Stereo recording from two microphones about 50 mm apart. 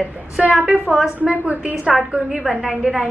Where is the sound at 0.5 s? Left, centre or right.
Right.